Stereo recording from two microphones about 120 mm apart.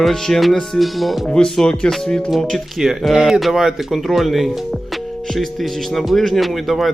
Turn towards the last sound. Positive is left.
turn(degrees=0)  # may be behind; listen again after turning